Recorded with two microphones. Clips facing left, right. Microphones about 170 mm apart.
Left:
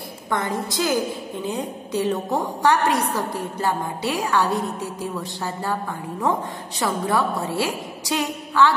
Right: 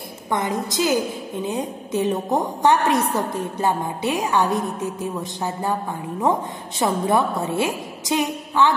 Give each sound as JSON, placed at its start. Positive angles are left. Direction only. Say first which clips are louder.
{"t": 0.3, "sound": "a woman's voice", "louder": "right 1 dB", "side_deg": -20}
{"t": 6.8, "sound": "a woman's voice", "louder": "right 3 dB", "side_deg": -20}